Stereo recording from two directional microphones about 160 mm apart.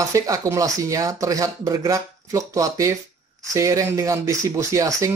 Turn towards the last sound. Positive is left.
turn(degrees=-20)  # may be behind; listen again after turning